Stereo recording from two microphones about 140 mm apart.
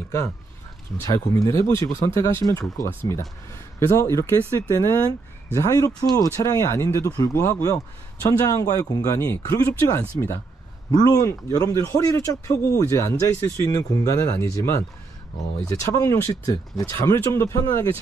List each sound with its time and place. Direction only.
0.9 s speech: 20° left (ahead or behind)